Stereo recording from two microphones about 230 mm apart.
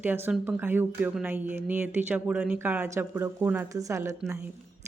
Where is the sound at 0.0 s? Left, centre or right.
Centre.